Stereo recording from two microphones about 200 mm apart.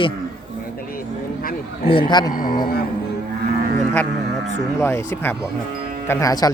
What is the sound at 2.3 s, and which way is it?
Speech, 45° left (ahead or behind).